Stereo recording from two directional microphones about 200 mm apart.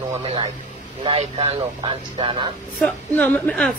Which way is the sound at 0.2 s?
25° right (ahead or behind).